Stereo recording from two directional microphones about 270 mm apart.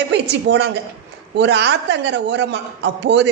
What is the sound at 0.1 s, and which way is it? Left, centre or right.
A woman's voice, right.